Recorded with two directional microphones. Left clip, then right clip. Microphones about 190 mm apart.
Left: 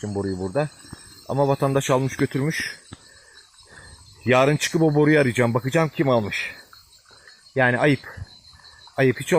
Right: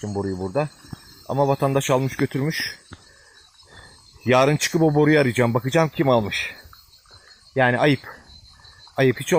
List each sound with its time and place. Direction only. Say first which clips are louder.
0.0 s speech: even; 15° right (ahead or behind)
4.2 s speech: right 1 dB; 15° right (ahead or behind)